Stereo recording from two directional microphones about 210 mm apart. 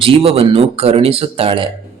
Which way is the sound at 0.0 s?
25° right (ahead or behind).